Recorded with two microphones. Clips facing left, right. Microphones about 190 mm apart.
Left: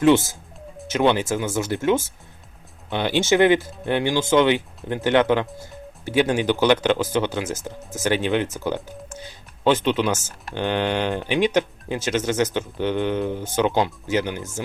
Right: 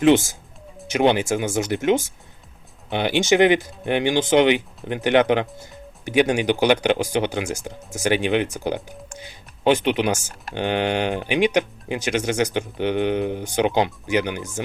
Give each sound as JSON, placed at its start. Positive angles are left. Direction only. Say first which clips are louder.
{"t": 1.1, "sound": "speech", "louder": "right 1 dB", "side_deg": -15}